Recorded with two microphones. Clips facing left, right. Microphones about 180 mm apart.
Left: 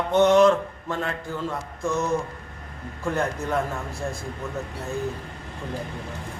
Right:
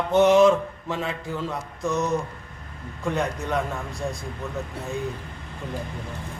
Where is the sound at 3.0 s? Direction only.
Centre (ahead or behind).